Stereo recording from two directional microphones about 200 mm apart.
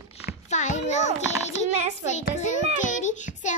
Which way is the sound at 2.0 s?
35° left (ahead or behind).